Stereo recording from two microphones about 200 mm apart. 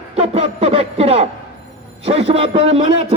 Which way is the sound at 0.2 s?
30° right (ahead or behind).